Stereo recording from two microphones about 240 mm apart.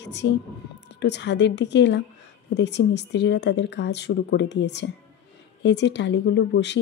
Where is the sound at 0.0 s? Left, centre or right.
Left.